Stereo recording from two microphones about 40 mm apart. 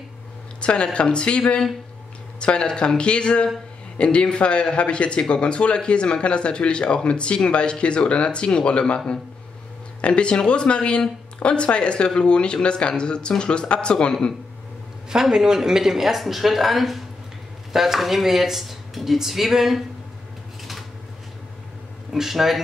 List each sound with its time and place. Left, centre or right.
0.6 s speech: left
15.0 s speech: centre
22.1 s speech: centre